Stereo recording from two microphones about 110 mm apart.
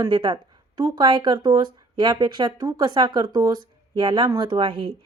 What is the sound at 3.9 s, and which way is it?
Speech, 50° right (ahead or behind).